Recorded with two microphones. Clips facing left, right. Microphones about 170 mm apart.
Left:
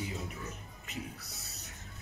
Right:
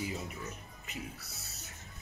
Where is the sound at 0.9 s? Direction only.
Centre (ahead or behind).